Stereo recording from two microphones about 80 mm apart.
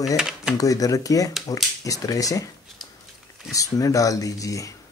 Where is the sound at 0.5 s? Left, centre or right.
Left.